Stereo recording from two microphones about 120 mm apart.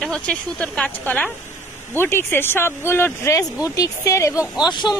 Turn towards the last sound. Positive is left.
turn(degrees=40)  # may be behind; listen again after turning